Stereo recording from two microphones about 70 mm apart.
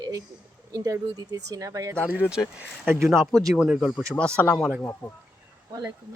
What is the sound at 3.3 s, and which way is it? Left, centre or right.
Speech, centre.